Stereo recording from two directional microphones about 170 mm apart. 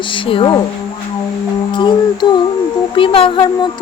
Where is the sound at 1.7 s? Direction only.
25° left (ahead or behind).